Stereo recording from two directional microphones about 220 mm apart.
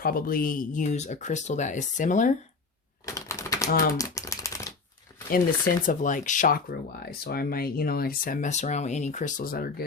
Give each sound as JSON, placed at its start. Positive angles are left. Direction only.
{"t": 0.0, "sound": "speech", "side_deg": 40}
{"t": 3.2, "sound": "typewriter", "side_deg": 15}
{"t": 5.3, "sound": "speech", "side_deg": 40}